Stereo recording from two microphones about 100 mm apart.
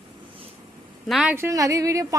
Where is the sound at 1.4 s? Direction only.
35° right (ahead or behind).